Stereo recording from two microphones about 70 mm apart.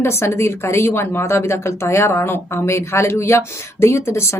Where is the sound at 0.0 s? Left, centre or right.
Left.